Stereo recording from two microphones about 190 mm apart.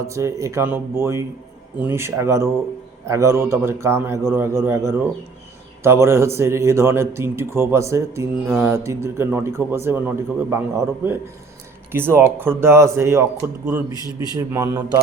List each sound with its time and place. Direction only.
0.0 s a man's voice: 15° right (ahead or behind)